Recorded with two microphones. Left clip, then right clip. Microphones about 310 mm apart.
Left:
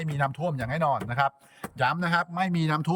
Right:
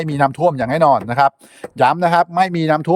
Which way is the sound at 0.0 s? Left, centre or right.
Centre.